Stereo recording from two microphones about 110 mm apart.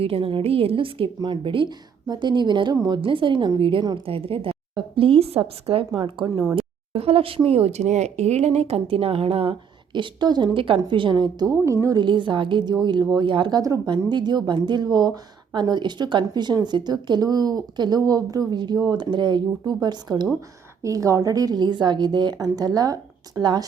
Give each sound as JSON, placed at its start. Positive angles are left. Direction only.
{"t": 0.0, "sound": "a woman's voice", "side_deg": -55}
{"t": 3.0, "sound": "a woman's voice", "side_deg": -50}
{"t": 6.2, "sound": "a woman's voice", "side_deg": -45}
{"t": 6.6, "sound": "speech", "side_deg": -60}
{"t": 9.9, "sound": "a woman's voice", "side_deg": -45}
{"t": 11.6, "sound": "a woman's voice", "side_deg": -25}
{"t": 11.9, "sound": "a woman's voice", "side_deg": -45}
{"t": 20.8, "sound": "speech", "side_deg": -30}